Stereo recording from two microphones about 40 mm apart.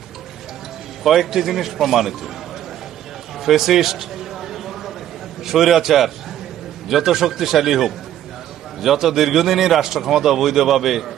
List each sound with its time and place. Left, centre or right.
1.0 s a man's voice: centre
3.4 s a sound: centre
5.5 s a man's voice: centre